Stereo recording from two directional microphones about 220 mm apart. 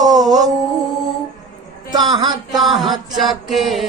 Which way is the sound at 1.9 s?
20° right (ahead or behind).